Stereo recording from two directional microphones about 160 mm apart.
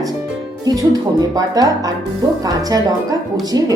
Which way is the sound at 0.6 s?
25° right (ahead or behind).